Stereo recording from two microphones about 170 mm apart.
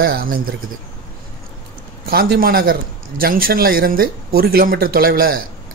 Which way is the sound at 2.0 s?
65° right (ahead or behind).